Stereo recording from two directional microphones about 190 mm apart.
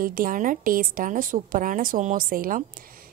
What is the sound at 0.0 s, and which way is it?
A woman's voice, 45° right (ahead or behind).